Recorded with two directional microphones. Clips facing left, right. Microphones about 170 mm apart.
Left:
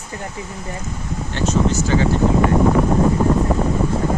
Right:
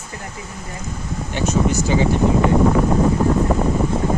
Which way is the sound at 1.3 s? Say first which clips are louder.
Even; 10° right (ahead or behind).